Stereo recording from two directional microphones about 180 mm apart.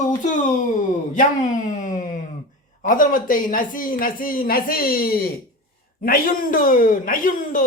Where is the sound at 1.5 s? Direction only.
45° left (ahead or behind).